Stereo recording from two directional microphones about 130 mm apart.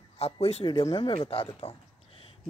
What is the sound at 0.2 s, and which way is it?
Speech, 50° left (ahead or behind).